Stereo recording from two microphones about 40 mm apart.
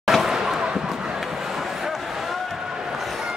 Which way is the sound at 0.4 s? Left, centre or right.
Centre.